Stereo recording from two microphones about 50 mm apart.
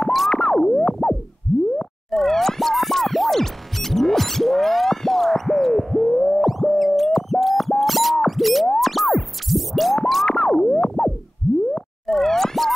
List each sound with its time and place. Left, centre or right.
0.0 s music: centre
0.3 s music: centre
2.0 s music: centre
6.4 s music: centre
10.2 s music: centre
12.1 s plop: centre